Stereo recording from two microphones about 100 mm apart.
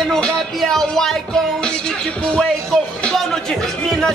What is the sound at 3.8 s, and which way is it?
Music, 5° left (ahead or behind).